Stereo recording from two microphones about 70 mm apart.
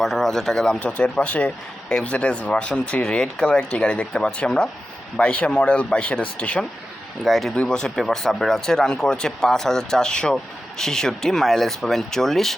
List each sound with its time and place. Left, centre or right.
0.0 s speech: centre
7.3 s speech: centre
7.5 s speech: centre